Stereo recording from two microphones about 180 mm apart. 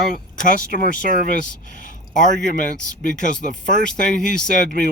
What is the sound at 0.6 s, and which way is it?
Speech, 55° right (ahead or behind).